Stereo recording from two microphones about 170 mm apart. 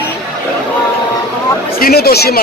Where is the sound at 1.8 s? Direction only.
60° left (ahead or behind).